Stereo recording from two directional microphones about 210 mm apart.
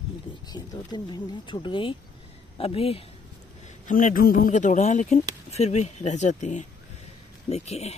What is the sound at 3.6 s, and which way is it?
Speech, 40° left (ahead or behind).